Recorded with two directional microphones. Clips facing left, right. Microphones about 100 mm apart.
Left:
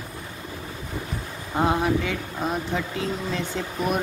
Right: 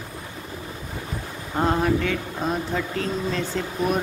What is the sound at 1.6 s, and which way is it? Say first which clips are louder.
Speech: right 1 dB; 5° left (ahead or behind).